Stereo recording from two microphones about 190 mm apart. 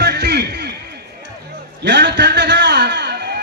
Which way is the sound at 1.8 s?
65° right (ahead or behind).